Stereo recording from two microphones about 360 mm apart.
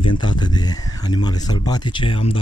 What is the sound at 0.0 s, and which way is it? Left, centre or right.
Speech, centre.